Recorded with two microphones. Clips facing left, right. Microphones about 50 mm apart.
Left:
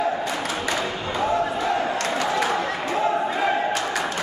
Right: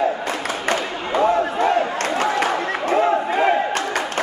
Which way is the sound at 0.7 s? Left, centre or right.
Right.